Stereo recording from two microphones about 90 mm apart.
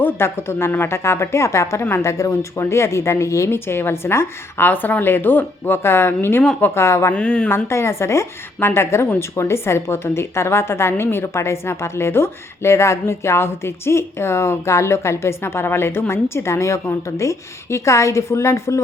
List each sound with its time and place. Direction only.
0.0 s a woman's voice: 25° left (ahead or behind)
7.1 s speech: 10° left (ahead or behind)
7.5 s a woman's voice: 30° left (ahead or behind)